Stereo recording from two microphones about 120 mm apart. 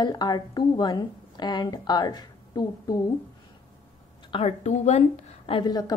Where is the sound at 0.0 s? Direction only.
35° left (ahead or behind).